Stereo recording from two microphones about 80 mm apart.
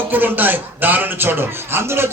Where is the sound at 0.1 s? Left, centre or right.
Right.